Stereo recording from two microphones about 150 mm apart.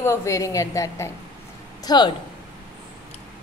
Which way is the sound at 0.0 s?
20° left (ahead or behind).